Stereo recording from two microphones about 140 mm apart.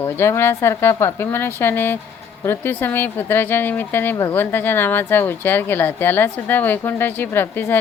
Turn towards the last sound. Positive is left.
turn(degrees=15)  # may be behind; listen again after turning